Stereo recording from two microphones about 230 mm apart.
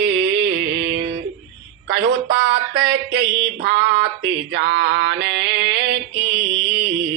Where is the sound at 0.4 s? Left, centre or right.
Right.